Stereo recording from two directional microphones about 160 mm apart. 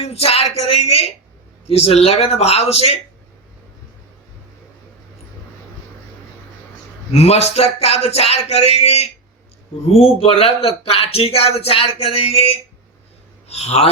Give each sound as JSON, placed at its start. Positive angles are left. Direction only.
{"t": 0.0, "sound": "a man's voice", "side_deg": 40}
{"t": 7.1, "sound": "a man's voice", "side_deg": 40}